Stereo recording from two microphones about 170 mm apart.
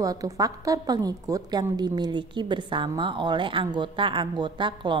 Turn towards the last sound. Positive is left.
turn(degrees=-25)  # may be behind; listen again after turning